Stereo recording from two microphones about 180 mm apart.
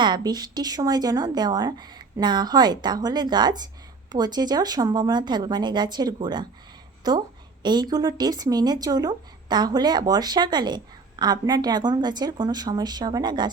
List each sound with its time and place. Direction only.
0.0 s a woman's voice: 25° right (ahead or behind)